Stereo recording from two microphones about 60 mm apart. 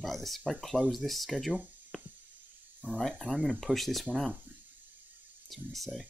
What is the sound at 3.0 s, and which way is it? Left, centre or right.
Speech, centre.